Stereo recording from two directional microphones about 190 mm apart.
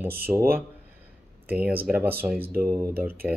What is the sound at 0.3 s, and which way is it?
Speech, 15° right (ahead or behind).